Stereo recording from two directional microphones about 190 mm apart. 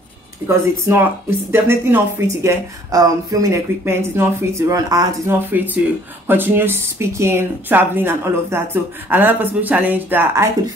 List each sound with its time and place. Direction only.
0.5 s speech: 15° right (ahead or behind)